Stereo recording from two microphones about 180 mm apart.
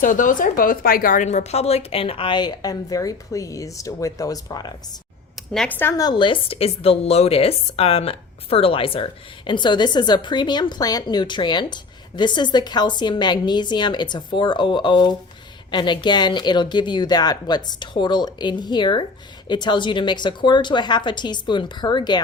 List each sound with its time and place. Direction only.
0.0 s speech: 45° left (ahead or behind); by 4.7 s 20° left (ahead or behind)
5.5 s a woman's voice: 5° left (ahead or behind); by 22.2 s 25° left (ahead or behind)